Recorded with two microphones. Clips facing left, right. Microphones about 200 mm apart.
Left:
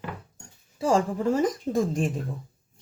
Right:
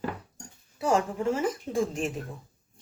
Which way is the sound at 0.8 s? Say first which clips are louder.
Left 3 dB; 30° left (ahead or behind).